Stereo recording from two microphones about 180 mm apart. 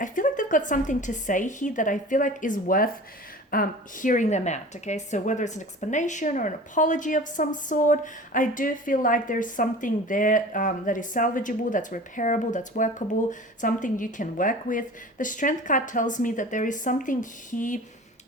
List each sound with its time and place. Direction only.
0.0 s a woman's voice: 45° left (ahead or behind)